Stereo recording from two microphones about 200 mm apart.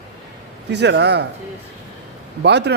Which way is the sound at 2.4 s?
60° right (ahead or behind).